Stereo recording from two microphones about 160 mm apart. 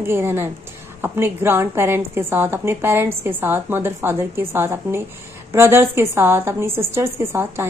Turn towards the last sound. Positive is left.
turn(degrees=-15)  # may be behind; listen again after turning